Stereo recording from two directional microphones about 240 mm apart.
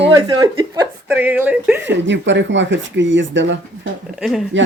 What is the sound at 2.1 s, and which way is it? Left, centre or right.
Speech, right.